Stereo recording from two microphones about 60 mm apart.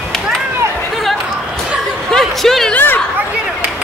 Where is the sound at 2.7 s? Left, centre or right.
Left.